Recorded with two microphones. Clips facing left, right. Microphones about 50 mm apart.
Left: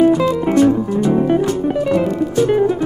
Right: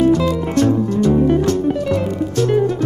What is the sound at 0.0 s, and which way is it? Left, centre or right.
Music, centre.